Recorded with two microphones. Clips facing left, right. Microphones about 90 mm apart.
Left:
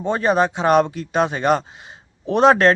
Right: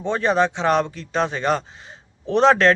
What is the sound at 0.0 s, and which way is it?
Speech, 10° left (ahead or behind).